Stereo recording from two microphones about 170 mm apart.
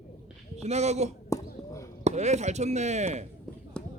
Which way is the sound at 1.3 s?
20° left (ahead or behind).